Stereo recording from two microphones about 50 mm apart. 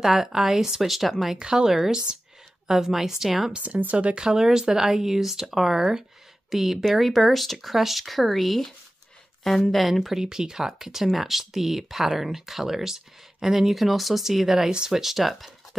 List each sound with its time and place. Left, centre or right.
0.0 s speech: centre
1.4 s speech: centre
2.7 s speech: centre
3.8 s speech: right; by 10.2 s centre
10.2 s speech: centre